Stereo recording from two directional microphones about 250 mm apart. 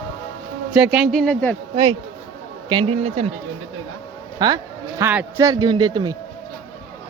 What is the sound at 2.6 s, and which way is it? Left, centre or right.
Speech, right.